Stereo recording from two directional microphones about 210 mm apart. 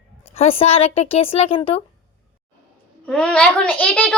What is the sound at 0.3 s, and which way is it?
A woman's voice, 30° left (ahead or behind).